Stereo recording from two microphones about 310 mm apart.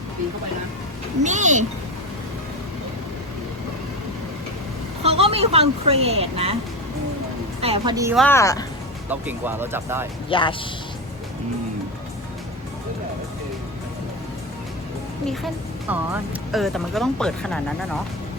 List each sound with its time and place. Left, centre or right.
1.2 s speech: right
5.0 s speech: centre
7.6 s speech: centre
8.1 s speech: centre
9.0 s speech: centre
10.2 s speech: centre
15.3 s speech: centre